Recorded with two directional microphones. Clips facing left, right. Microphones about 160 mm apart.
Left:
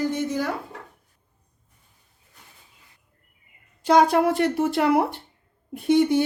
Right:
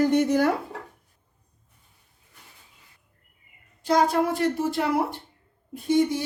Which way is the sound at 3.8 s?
70° left (ahead or behind).